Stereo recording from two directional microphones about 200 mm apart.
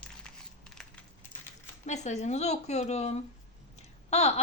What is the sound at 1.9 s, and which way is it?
Speech, 35° left (ahead or behind).